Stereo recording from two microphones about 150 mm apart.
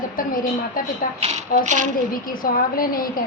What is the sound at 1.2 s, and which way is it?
Speech, 45° right (ahead or behind).